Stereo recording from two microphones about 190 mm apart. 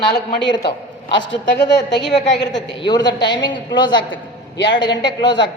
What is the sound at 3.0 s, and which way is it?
Speech, 65° left (ahead or behind).